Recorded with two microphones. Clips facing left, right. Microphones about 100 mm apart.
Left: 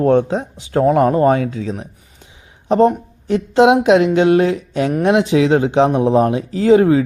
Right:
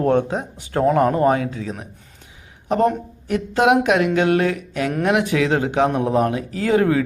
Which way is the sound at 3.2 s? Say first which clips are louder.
Left 5 dB; 25° left (ahead or behind).